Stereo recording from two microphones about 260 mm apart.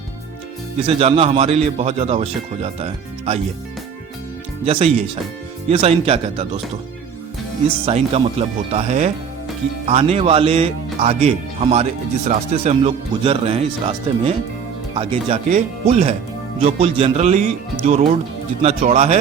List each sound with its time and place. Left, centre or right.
0.8 s speech: right
4.6 s speech: right
7.9 s speech: right